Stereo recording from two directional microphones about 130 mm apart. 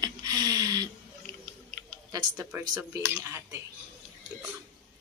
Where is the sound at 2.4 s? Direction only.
15° right (ahead or behind).